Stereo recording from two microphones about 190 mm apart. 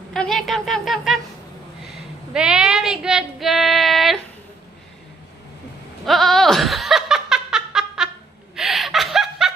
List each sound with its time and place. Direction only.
0.1 s a woman's voice: centre (ahead or behind)
2.3 s child singing: 5° right (ahead or behind)
6.0 s laughter: centre (ahead or behind)
8.5 s snicker: centre (ahead or behind)